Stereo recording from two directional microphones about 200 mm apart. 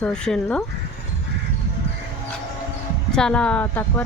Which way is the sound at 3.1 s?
5° left (ahead or behind).